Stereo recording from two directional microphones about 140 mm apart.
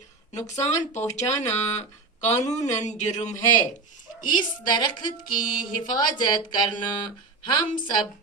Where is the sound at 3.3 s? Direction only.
25° left (ahead or behind).